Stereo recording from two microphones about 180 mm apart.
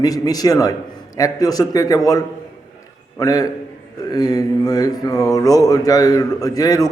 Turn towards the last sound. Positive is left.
turn(degrees=20)  # may be behind; listen again after turning